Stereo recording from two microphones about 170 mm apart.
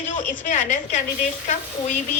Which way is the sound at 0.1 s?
50° left (ahead or behind).